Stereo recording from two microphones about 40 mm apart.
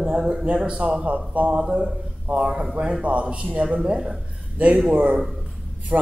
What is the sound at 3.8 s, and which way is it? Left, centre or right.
Speech, centre.